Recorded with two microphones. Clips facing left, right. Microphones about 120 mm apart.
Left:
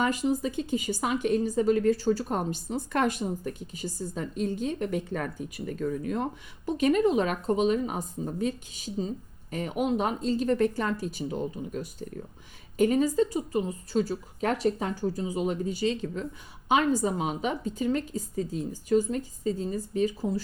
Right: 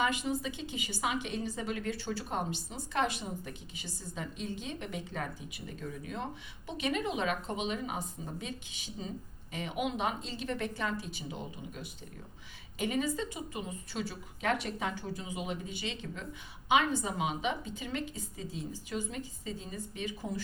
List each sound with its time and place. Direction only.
0.0 s a woman's voice: 40° left (ahead or behind)